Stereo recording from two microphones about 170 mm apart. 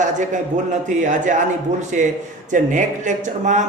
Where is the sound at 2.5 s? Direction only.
50° right (ahead or behind).